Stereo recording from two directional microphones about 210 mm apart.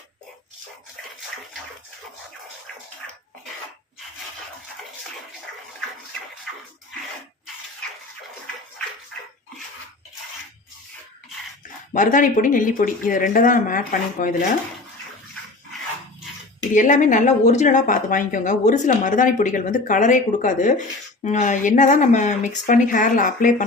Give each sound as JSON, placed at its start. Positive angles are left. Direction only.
{"t": 11.9, "sound": "speech", "side_deg": 40}
{"t": 16.7, "sound": "speech", "side_deg": 40}